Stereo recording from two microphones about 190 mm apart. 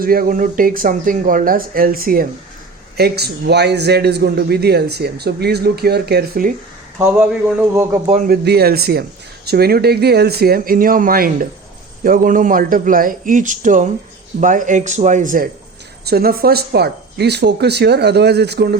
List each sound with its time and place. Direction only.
0.0 s a man's voice: 50° right (ahead or behind)
7.2 s speech: 15° right (ahead or behind)
8.3 s a man's voice: 55° right (ahead or behind)
16.0 s a man's voice: 55° right (ahead or behind)